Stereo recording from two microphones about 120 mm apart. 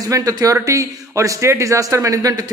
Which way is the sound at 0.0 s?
30° right (ahead or behind).